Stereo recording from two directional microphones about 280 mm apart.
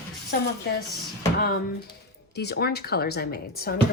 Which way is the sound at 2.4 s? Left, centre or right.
Left.